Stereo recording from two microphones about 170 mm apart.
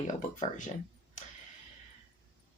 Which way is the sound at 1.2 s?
45° left (ahead or behind).